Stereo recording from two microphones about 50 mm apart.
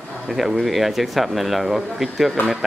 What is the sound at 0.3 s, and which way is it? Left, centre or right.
Speech, centre.